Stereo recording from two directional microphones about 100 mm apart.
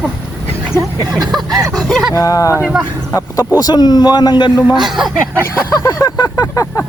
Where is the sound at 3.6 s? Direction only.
45° left (ahead or behind).